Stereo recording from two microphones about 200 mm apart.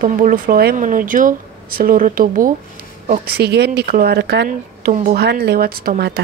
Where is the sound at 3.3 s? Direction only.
55° right (ahead or behind).